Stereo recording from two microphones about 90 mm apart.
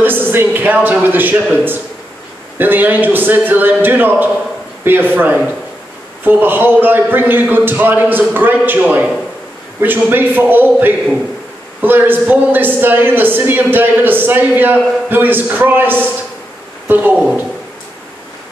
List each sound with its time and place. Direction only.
0.0 s a woman's voice: 20° right (ahead or behind)